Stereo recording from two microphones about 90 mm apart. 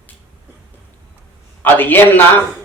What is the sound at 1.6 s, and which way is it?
Speech, 20° left (ahead or behind).